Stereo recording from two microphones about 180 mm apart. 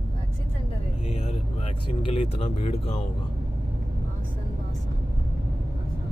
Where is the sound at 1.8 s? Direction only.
30° left (ahead or behind).